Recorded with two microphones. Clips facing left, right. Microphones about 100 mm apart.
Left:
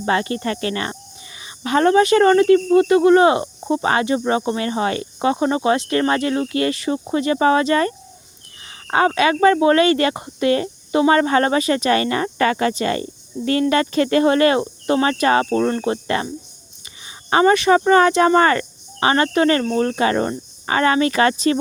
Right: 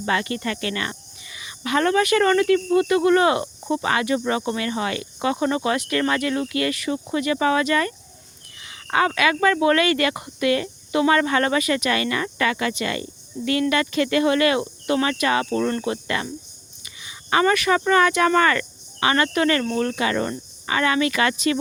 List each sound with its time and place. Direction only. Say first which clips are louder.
0.0 s speech: left 4 dB; 30° left (ahead or behind)